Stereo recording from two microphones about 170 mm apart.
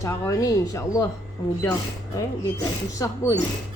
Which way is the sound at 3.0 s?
20° left (ahead or behind).